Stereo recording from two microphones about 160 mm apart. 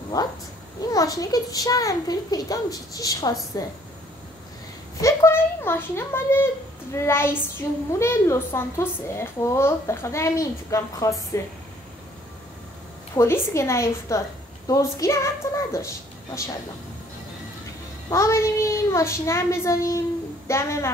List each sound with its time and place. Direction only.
0.1 s a child's voice: 25° left (ahead or behind)
5.0 s a woman's voice: 15° left (ahead or behind)
13.1 s a woman's voice: 15° left (ahead or behind)
18.1 s a woman's voice: 15° left (ahead or behind)